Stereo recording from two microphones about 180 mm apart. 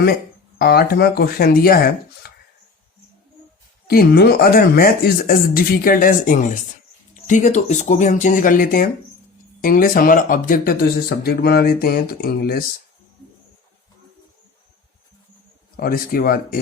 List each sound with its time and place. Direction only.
0.6 s speech: 60° left (ahead or behind)
3.8 s speech: 60° left (ahead or behind)
15.8 s speech: 55° left (ahead or behind)